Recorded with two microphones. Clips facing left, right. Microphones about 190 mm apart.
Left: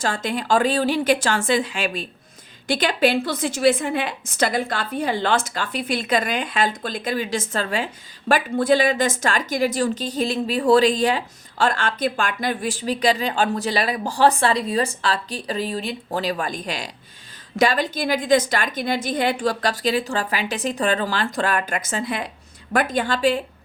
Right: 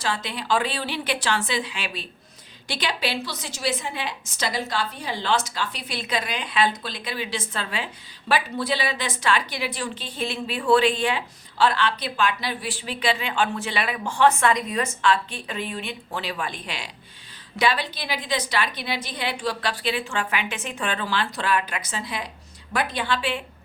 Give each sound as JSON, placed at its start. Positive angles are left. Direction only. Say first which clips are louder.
{"t": 0.0, "sound": "a woman's voice", "louder": "left 5 dB", "side_deg": 45}